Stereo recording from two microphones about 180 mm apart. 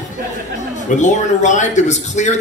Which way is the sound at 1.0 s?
40° left (ahead or behind).